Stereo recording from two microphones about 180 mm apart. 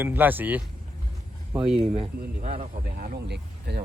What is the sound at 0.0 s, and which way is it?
Speech, 10° right (ahead or behind).